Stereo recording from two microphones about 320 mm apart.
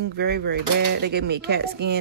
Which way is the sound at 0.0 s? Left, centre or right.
Right.